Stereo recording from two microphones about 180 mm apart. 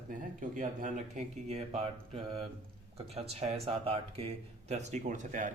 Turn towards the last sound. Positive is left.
turn(degrees=-45)  # may be behind; listen again after turning